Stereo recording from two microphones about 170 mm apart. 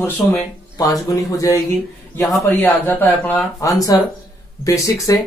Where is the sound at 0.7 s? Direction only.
20° left (ahead or behind).